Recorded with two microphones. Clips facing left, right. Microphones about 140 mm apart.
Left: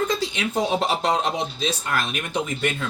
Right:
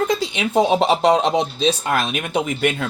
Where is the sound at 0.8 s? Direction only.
75° right (ahead or behind).